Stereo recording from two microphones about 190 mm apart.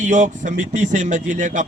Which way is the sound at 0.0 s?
40° right (ahead or behind).